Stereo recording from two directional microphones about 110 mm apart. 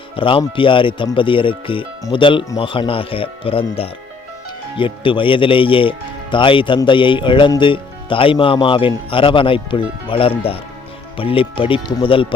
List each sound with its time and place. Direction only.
0.2 s speech: 50° left (ahead or behind)